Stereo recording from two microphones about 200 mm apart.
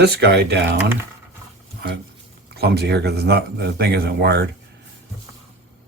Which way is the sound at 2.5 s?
55° right (ahead or behind).